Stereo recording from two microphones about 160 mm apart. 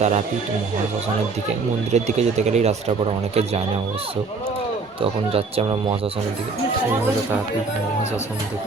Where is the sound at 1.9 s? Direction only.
45° right (ahead or behind).